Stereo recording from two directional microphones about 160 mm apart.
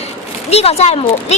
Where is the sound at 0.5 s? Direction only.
40° left (ahead or behind).